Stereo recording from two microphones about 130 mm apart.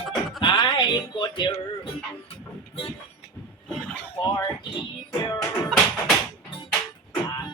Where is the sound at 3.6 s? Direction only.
10° left (ahead or behind).